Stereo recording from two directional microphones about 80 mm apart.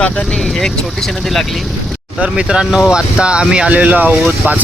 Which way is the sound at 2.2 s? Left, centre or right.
Centre.